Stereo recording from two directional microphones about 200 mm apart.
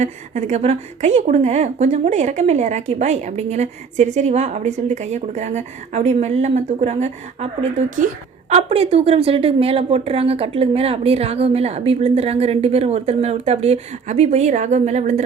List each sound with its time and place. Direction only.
0.0 s a woman's voice: 35° right (ahead or behind)